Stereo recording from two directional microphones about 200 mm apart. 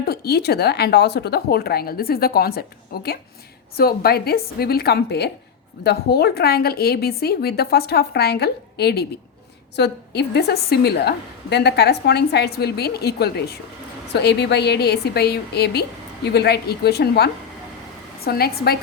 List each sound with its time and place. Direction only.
0.0 s a woman's voice: 50° left (ahead or behind)